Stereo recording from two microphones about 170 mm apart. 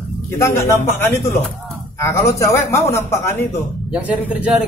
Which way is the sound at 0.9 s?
15° left (ahead or behind).